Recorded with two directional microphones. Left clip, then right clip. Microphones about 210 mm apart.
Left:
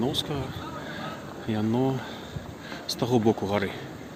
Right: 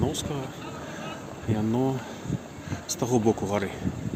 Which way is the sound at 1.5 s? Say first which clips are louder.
Even; centre (ahead or behind).